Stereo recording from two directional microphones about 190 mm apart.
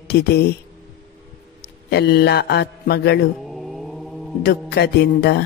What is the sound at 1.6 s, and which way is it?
A man's voice, 60° left (ahead or behind).